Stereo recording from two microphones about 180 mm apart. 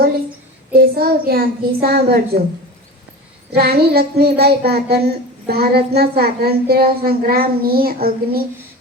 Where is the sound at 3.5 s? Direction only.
60° right (ahead or behind).